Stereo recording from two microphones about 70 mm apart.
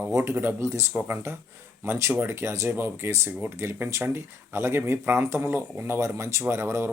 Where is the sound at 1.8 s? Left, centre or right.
Right.